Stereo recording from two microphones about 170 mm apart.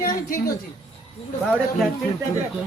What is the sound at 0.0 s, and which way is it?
Speech, 55° left (ahead or behind).